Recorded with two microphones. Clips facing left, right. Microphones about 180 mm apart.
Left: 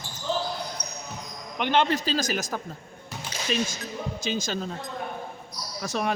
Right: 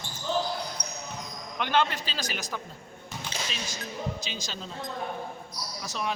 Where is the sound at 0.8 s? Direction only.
60° right (ahead or behind).